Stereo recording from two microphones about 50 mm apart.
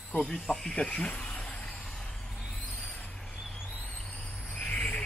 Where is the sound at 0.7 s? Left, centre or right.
Left.